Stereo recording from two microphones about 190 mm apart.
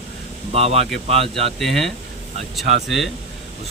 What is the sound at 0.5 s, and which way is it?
Speech, 30° right (ahead or behind).